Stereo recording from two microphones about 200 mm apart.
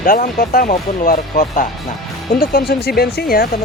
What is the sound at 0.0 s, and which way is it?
Speech, 45° left (ahead or behind).